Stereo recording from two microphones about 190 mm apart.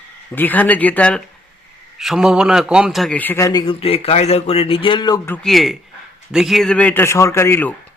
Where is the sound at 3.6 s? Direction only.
30° left (ahead or behind).